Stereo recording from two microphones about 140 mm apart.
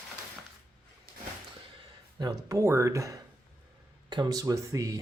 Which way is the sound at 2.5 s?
20° right (ahead or behind).